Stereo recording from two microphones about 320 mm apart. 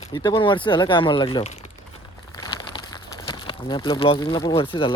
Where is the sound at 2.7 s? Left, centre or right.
Centre.